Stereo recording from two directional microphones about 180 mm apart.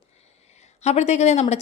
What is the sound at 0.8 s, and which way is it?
Speech, 40° left (ahead or behind).